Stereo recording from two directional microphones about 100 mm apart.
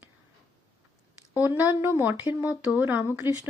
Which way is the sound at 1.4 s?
15° right (ahead or behind).